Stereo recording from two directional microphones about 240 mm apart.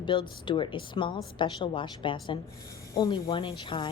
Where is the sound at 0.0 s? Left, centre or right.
Centre.